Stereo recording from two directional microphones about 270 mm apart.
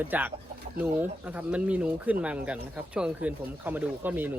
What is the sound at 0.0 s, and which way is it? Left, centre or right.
Speech, centre.